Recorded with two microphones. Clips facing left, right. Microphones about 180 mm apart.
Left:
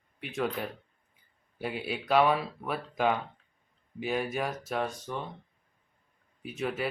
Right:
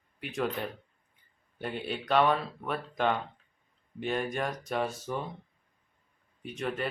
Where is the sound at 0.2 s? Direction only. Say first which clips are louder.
Even; centre (ahead or behind).